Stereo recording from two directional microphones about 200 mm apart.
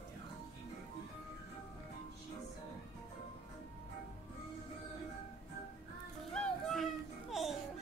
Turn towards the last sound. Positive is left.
turn(degrees=0)  # may be behind; listen again after turning